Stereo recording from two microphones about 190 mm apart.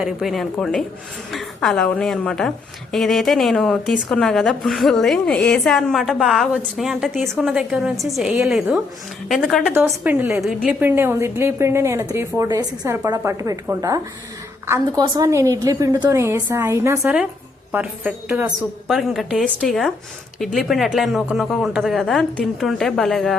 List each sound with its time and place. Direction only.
0.0 s a woman's voice: centre (ahead or behind)